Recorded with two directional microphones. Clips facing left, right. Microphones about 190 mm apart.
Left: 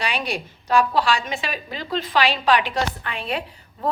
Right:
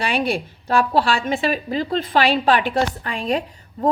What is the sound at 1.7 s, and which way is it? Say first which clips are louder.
A woman's voice: even; 45° right (ahead or behind).